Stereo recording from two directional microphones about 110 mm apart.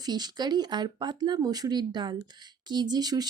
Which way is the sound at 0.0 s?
40° right (ahead or behind).